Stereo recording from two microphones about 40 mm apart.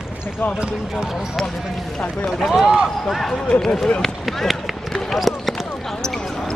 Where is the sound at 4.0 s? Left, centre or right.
Centre.